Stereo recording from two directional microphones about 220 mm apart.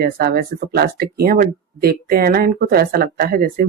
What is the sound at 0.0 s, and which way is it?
Speech, 45° right (ahead or behind).